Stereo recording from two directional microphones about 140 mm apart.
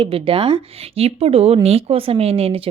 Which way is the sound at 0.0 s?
40° right (ahead or behind).